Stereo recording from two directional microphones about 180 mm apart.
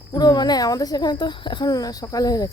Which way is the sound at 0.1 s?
25° left (ahead or behind).